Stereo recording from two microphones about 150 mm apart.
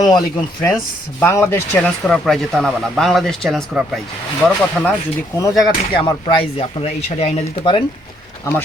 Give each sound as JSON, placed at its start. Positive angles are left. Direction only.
{"t": 0.0, "sound": "speech", "side_deg": 25}
{"t": 1.2, "sound": "speech", "side_deg": 15}
{"t": 1.8, "sound": "speech", "side_deg": 5}
{"t": 5.4, "sound": "speech", "side_deg": 20}
{"t": 5.9, "sound": "speech", "side_deg": 30}